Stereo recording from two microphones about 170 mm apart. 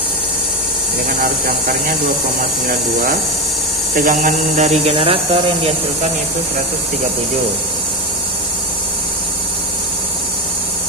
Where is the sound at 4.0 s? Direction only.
50° right (ahead or behind).